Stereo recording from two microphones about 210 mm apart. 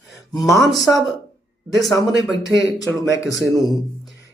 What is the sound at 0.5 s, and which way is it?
A man's voice, centre (ahead or behind).